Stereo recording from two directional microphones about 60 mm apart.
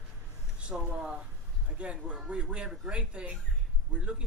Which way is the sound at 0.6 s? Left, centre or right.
Centre.